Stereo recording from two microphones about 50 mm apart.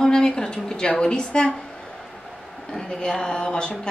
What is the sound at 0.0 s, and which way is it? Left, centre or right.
A woman's voice, centre.